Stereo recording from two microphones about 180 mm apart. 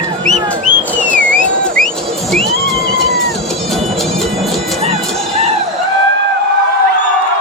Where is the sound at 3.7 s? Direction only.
Centre (ahead or behind).